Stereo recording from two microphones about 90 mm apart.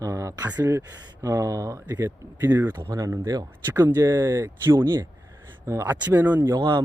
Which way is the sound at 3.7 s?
25° right (ahead or behind).